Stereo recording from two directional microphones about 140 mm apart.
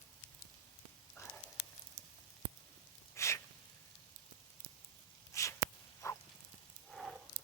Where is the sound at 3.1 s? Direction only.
20° left (ahead or behind).